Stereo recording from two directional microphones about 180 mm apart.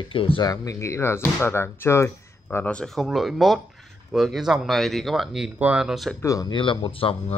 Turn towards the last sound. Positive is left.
turn(degrees=30)  # may be behind; listen again after turning